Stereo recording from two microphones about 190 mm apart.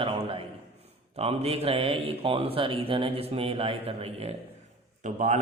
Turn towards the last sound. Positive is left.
turn(degrees=-40)  # may be behind; listen again after turning